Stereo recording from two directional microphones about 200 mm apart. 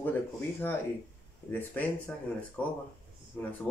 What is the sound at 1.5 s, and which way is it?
Speech, 10° left (ahead or behind).